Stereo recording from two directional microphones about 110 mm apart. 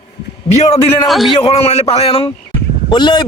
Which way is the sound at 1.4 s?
65° left (ahead or behind).